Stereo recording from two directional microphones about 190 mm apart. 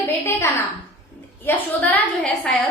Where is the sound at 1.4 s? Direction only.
10° left (ahead or behind).